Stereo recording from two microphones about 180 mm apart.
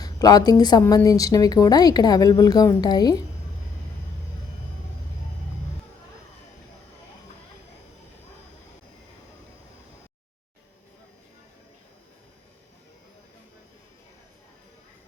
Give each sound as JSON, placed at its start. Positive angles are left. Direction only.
{"t": 0.0, "sound": "a woman's voice", "side_deg": 20}